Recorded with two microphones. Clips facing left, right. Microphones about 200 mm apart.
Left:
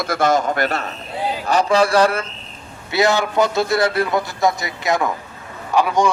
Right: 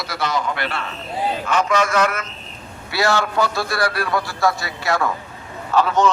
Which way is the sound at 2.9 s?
20° left (ahead or behind).